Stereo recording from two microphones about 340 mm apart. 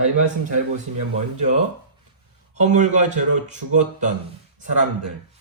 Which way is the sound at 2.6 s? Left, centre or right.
Right.